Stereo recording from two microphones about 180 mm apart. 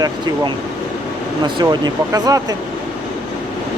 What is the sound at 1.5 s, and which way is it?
Speech, 25° right (ahead or behind).